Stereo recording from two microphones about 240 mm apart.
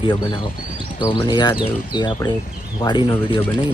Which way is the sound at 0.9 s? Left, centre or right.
Centre.